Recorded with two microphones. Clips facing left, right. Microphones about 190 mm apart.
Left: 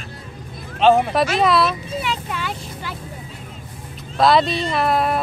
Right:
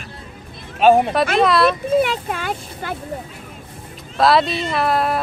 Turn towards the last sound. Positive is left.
turn(degrees=0)  # may be behind; listen again after turning